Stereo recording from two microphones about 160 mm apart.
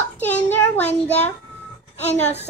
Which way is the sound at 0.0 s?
10° left (ahead or behind).